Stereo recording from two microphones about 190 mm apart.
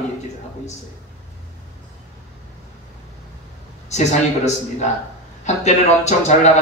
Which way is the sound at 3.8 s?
35° left (ahead or behind).